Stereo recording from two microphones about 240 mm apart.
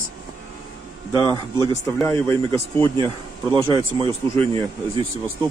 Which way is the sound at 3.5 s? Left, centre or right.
Right.